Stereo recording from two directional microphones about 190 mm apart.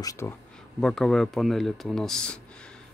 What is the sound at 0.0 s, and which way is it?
Speech, 15° left (ahead or behind).